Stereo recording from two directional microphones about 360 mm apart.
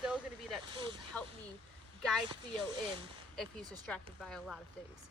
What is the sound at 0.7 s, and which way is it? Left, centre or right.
Speech, centre.